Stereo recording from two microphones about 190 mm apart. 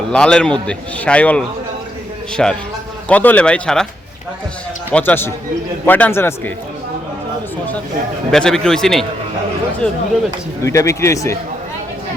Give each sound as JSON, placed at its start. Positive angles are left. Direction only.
{"t": 0.1, "sound": "a man's voice", "side_deg": 5}
{"t": 4.9, "sound": "speech", "side_deg": 10}
{"t": 8.3, "sound": "a man's voice", "side_deg": 0}